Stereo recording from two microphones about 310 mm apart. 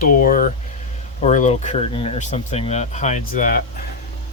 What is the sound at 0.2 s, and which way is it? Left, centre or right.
Speech, left.